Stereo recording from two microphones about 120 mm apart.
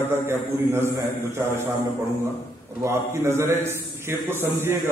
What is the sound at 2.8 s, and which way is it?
A man's voice, 20° right (ahead or behind).